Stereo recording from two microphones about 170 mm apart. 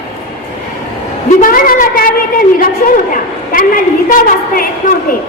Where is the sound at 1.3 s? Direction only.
55° left (ahead or behind).